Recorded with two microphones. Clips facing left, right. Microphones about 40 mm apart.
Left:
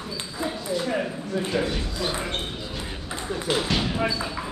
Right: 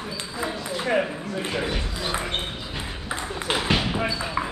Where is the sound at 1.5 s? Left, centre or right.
Centre.